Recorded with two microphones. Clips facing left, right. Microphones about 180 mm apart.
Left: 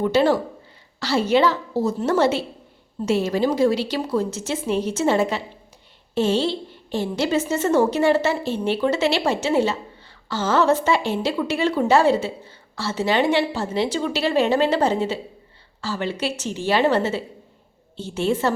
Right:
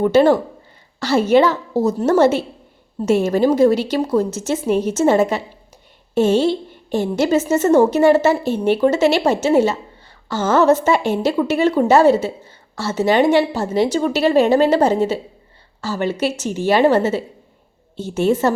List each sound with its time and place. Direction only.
0.0 s a woman's voice: 50° right (ahead or behind)